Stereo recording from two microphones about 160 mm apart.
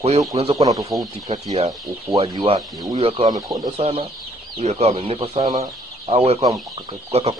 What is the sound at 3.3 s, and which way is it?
Speech, 25° right (ahead or behind).